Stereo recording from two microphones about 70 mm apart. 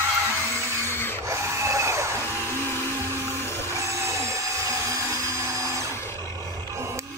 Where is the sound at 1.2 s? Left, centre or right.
Right.